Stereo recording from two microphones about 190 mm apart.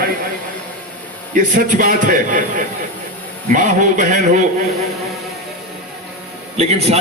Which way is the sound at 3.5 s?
40° right (ahead or behind).